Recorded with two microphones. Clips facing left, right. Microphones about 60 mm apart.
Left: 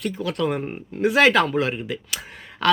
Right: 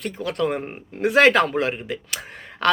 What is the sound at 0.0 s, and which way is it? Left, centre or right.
Speech, right.